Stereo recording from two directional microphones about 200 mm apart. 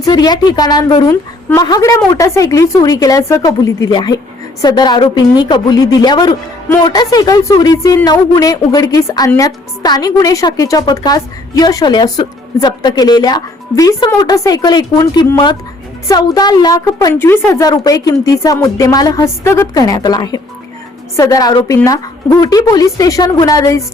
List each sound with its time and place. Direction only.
0.0 s a woman's voice: 20° left (ahead or behind)